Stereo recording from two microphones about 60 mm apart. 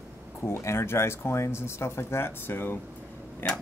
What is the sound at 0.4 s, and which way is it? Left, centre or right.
Speech, left.